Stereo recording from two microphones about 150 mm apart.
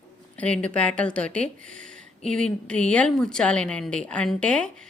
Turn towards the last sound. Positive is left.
turn(degrees=5)  # may be behind; listen again after turning